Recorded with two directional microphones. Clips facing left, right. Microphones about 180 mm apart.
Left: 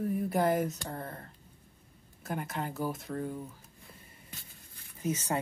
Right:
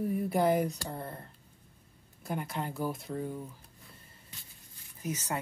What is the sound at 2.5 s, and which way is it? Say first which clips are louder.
Speech: left 1 dB; centre (ahead or behind).